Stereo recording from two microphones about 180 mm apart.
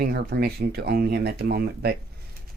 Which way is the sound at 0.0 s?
60° right (ahead or behind).